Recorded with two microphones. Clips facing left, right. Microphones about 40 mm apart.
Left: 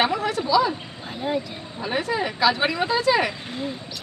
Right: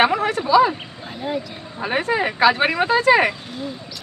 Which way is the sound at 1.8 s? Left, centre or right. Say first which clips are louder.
Right 4 dB; right.